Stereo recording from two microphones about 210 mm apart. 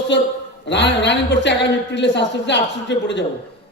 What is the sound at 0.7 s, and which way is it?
A man's voice, 55° left (ahead or behind).